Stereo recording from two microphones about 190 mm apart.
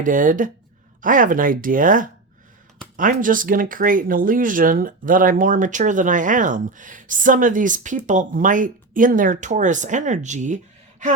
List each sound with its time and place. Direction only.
0.0 s speech: 45° right (ahead or behind)